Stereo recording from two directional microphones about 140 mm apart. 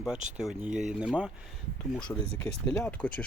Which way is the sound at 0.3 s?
5° right (ahead or behind).